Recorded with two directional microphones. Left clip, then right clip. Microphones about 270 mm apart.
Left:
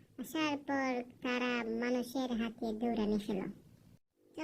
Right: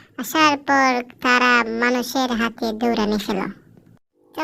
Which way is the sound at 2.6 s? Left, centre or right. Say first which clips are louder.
Right 14 dB; right.